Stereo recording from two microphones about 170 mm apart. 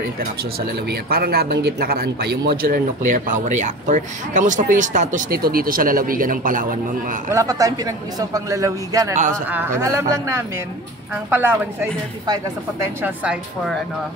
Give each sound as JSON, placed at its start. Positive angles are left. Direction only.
{"t": 0.2, "sound": "speech", "side_deg": -65}
{"t": 5.3, "sound": "speech", "side_deg": -60}
{"t": 7.3, "sound": "speech", "side_deg": -20}
{"t": 13.0, "sound": "speech", "side_deg": -5}